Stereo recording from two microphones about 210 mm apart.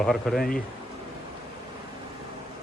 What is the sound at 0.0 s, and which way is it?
Speech, centre (ahead or behind).